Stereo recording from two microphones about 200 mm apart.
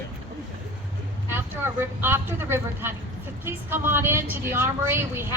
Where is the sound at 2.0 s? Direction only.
10° right (ahead or behind).